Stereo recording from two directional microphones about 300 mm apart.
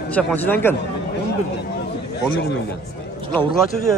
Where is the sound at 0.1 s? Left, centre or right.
Centre.